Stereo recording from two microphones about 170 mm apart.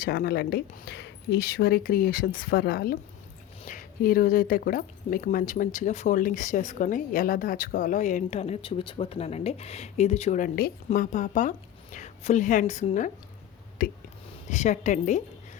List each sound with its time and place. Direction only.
0.0 s a woman's voice: 65° left (ahead or behind); by 13.1 s 45° left (ahead or behind)
13.8 s speech: 55° left (ahead or behind)
14.5 s speech: 45° left (ahead or behind)